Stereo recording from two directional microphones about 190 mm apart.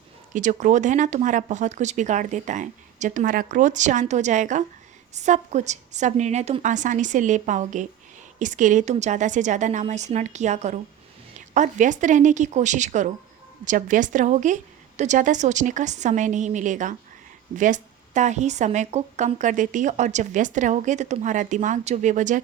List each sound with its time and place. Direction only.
0.3 s a woman's voice: 40° right (ahead or behind)